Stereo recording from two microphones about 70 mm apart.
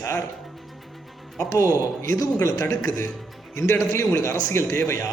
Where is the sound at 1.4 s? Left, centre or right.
Left.